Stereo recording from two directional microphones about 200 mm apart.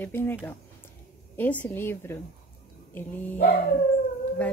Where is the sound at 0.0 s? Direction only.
10° left (ahead or behind).